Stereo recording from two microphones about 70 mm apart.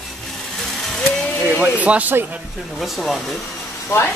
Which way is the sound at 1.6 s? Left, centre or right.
Right.